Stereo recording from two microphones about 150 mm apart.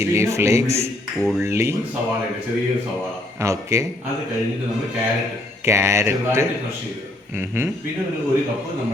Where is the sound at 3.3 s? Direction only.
20° right (ahead or behind).